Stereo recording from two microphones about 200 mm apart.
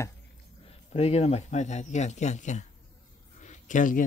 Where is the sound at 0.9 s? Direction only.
30° left (ahead or behind).